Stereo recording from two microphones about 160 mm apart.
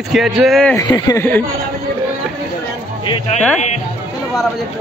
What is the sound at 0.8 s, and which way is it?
Speech, 25° left (ahead or behind).